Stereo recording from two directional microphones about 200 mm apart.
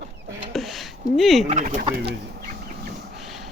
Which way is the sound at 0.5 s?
Centre (ahead or behind).